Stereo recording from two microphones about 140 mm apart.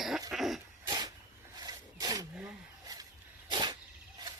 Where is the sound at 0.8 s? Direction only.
30° right (ahead or behind).